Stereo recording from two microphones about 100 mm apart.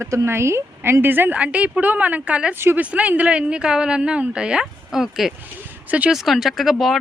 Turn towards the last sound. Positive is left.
turn(degrees=0)  # may be behind; listen again after turning